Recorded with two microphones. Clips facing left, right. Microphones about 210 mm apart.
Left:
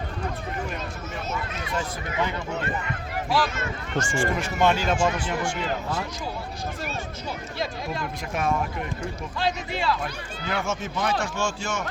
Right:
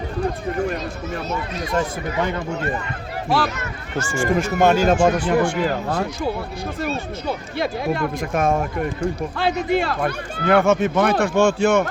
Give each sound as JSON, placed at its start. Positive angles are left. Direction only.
{"t": 1.3, "sound": "speech", "side_deg": -40}
{"t": 3.2, "sound": "speech", "side_deg": -60}
{"t": 4.2, "sound": "speech", "side_deg": -45}
{"t": 5.2, "sound": "speech", "side_deg": -60}
{"t": 9.4, "sound": "speech", "side_deg": -60}